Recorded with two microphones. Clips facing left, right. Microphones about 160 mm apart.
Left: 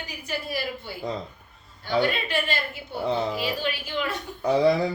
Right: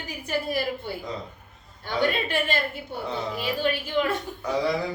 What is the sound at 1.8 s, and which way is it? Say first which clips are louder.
Speech: left 1 dB; 50° right (ahead or behind).